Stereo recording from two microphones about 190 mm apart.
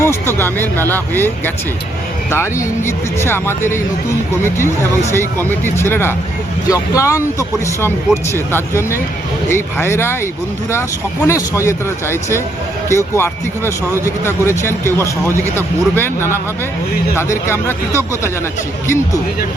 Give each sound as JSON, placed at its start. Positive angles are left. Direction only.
{"t": 0.0, "sound": "speech", "side_deg": 15}
{"t": 11.3, "sound": "speech", "side_deg": 15}